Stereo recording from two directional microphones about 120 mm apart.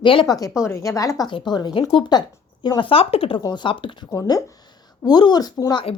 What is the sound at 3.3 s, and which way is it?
Speech, 35° left (ahead or behind).